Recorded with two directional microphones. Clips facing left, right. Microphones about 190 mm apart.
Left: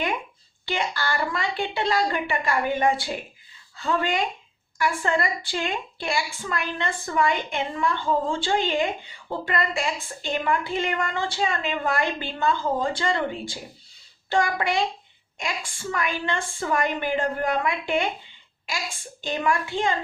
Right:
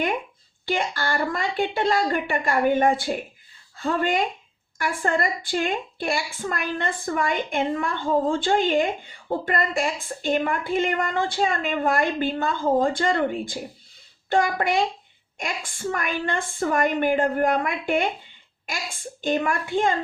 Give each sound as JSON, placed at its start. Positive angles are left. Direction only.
{"t": 0.6, "sound": "a woman's voice", "side_deg": -50}
{"t": 19.2, "sound": "a woman's voice", "side_deg": -50}